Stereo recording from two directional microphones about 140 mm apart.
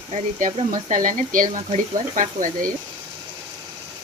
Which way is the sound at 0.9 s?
70° right (ahead or behind).